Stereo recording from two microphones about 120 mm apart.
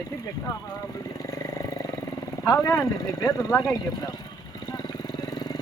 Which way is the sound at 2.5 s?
25° left (ahead or behind).